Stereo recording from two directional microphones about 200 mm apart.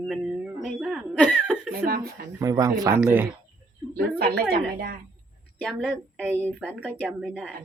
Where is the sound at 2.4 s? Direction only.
15° right (ahead or behind).